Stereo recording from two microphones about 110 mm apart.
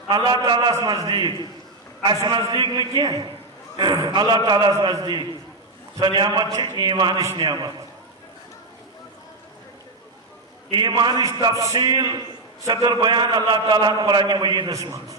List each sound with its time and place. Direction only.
0.1 s a man's voice: 45° right (ahead or behind)
0.7 s a man's voice: 30° right (ahead or behind)
2.5 s a man's voice: 40° right (ahead or behind)
7.3 s a man's voice: 30° right (ahead or behind)
10.8 s a man's voice: 40° right (ahead or behind)
14.7 s a man's voice: 30° right (ahead or behind)